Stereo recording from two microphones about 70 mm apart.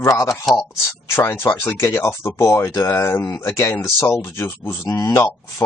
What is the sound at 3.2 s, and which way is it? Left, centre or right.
Speech, left.